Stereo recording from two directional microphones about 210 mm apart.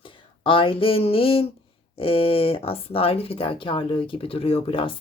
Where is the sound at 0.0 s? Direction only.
25° left (ahead or behind).